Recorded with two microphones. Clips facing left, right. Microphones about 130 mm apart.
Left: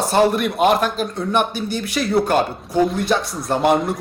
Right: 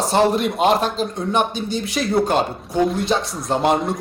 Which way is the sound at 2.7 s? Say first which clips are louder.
Left 1 dB; centre (ahead or behind).